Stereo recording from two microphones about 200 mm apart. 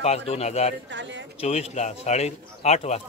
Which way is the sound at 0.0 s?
30° left (ahead or behind).